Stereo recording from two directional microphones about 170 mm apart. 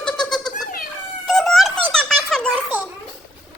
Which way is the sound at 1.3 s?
Centre (ahead or behind).